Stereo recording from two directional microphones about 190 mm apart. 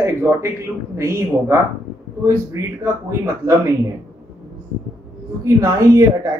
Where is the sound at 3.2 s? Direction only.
15° right (ahead or behind).